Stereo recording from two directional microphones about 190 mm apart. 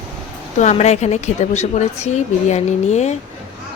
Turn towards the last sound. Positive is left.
turn(degrees=35)  # may be behind; listen again after turning